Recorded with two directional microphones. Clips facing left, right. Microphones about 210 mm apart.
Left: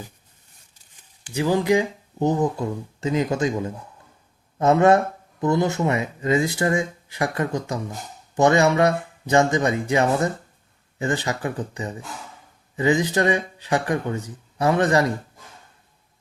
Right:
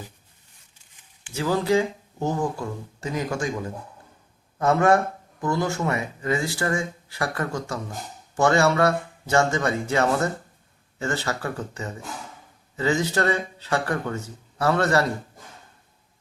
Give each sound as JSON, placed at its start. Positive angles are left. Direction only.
{"t": 1.3, "sound": "speech", "side_deg": 15}